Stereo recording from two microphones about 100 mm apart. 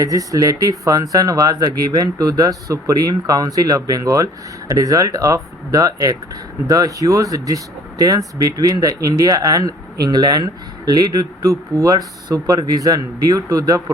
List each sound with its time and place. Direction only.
0.0 s speech: 35° right (ahead or behind)